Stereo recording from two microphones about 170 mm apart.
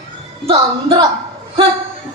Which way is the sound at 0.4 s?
30° right (ahead or behind).